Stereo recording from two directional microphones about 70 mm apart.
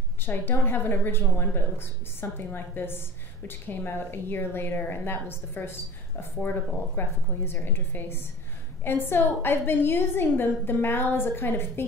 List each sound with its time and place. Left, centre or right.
0.2 s a woman's voice: left